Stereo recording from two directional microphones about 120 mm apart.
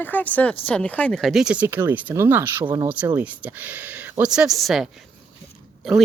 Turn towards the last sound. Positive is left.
turn(degrees=0)  # may be behind; listen again after turning